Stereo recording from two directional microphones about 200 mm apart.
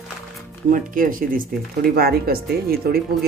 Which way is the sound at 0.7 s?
45° right (ahead or behind).